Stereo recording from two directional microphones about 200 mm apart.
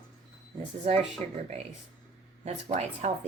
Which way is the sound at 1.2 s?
35° right (ahead or behind).